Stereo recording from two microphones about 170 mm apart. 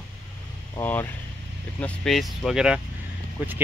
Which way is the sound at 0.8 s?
10° left (ahead or behind).